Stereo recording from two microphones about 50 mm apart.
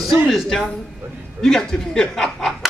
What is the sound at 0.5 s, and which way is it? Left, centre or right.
Speech, centre.